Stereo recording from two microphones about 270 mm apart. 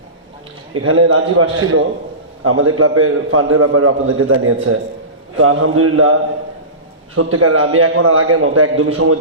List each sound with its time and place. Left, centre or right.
0.7 s a man's voice: right
7.2 s a man's voice: right